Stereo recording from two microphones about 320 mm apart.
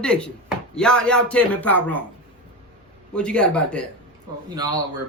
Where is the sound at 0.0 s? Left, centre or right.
Centre.